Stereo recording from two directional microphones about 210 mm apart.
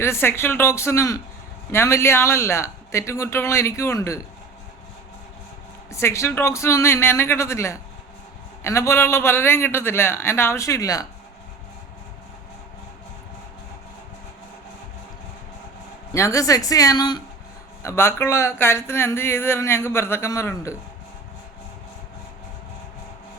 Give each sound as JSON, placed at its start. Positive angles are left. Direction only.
{"t": 0.0, "sound": "speech", "side_deg": 10}
{"t": 5.9, "sound": "speech", "side_deg": 15}
{"t": 16.1, "sound": "speech", "side_deg": 15}